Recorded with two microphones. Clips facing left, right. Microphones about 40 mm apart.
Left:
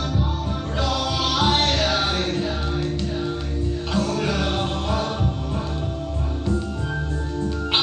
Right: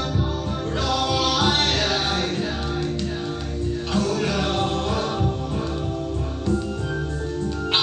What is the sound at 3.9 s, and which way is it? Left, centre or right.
Music, centre.